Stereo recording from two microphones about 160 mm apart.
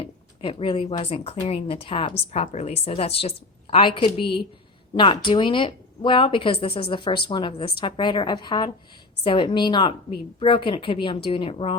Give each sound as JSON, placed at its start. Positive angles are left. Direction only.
{"t": 0.0, "sound": "a woman's voice", "side_deg": 30}